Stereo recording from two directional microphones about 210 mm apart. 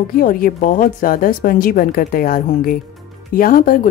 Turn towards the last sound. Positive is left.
turn(degrees=40)  # may be behind; listen again after turning